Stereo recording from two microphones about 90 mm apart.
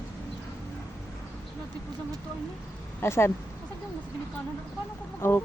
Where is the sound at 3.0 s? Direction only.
30° left (ahead or behind).